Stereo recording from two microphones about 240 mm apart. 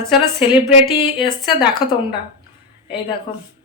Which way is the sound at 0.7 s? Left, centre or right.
Left.